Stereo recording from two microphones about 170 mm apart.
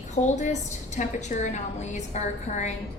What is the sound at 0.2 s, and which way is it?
A woman's voice, 45° left (ahead or behind).